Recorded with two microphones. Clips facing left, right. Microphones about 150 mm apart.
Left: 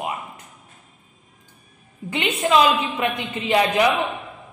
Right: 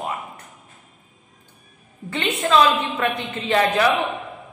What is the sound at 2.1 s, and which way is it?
A woman's voice, 15° left (ahead or behind).